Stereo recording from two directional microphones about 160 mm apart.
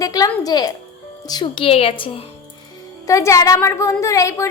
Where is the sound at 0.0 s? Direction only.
20° left (ahead or behind).